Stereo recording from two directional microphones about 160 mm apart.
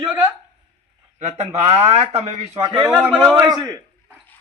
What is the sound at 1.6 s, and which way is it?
Speech, 45° right (ahead or behind).